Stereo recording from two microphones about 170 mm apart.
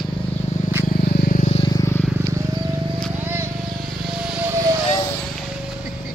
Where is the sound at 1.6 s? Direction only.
20° left (ahead or behind).